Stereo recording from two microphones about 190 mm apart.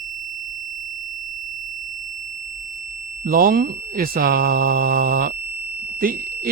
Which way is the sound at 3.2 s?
50° right (ahead or behind).